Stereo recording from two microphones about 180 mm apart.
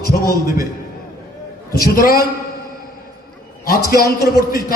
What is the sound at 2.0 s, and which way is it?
Speech, 55° left (ahead or behind).